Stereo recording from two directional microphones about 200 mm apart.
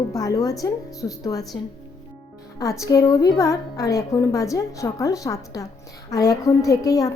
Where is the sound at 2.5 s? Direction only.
15° left (ahead or behind).